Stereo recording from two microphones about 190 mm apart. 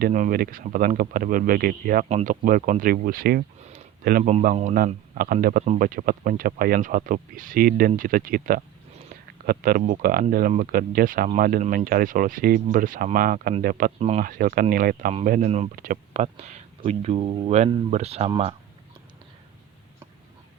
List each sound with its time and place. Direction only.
0.0 s speech: 45° right (ahead or behind)
2.0 s speech: 40° right (ahead or behind)
4.2 s speech: 40° right (ahead or behind)
14.0 s speech: 40° right (ahead or behind)
15.7 s speech: 45° right (ahead or behind)